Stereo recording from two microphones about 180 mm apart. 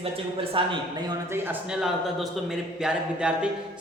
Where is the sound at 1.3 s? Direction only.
5° right (ahead or behind).